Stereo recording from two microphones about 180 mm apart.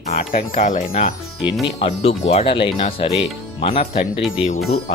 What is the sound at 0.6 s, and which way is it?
Speech, 45° left (ahead or behind).